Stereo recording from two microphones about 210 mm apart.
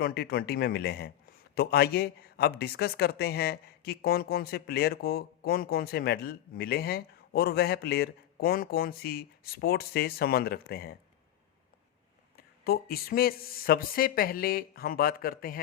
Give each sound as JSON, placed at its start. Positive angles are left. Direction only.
{"t": 0.0, "sound": "speech", "side_deg": 45}
{"t": 12.4, "sound": "speech", "side_deg": 45}